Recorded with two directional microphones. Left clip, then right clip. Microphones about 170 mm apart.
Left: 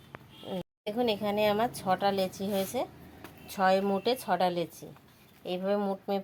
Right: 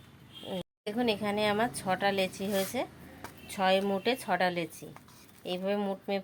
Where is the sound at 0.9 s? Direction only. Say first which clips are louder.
Left 1 dB; 15° left (ahead or behind).